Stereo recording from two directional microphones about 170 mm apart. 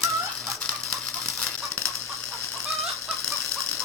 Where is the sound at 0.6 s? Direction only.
5° left (ahead or behind).